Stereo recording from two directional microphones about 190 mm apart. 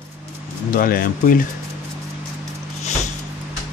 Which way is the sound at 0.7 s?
50° left (ahead or behind).